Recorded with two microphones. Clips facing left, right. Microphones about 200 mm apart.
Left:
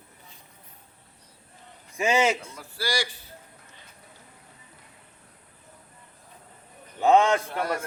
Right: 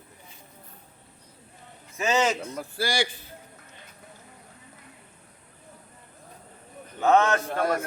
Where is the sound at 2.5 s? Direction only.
55° right (ahead or behind).